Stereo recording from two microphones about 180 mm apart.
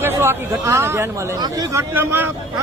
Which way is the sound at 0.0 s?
15° right (ahead or behind).